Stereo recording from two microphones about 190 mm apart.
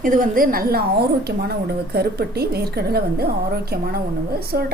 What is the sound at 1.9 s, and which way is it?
A woman's voice, 55° right (ahead or behind).